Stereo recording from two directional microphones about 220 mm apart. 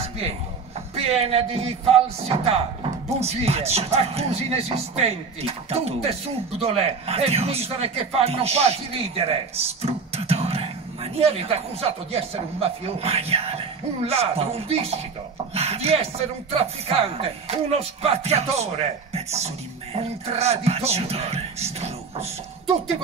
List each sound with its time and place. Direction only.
0.9 s a man's voice: 25° right (ahead or behind)